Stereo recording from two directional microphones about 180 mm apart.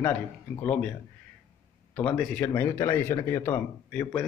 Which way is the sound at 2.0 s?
10° left (ahead or behind).